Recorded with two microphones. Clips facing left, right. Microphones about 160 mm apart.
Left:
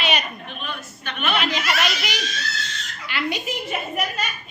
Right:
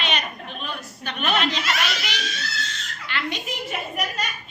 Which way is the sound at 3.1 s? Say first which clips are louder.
Left 3 dB; 10° left (ahead or behind).